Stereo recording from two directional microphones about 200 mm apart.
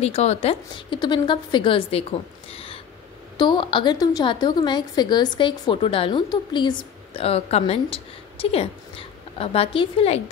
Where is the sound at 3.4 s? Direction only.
25° left (ahead or behind).